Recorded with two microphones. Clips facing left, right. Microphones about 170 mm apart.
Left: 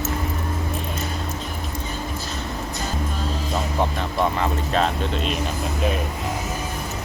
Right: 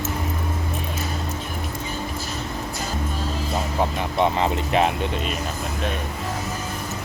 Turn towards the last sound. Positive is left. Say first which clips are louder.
# left 1 dB
turn(degrees=-5)  # may be behind; listen again after turning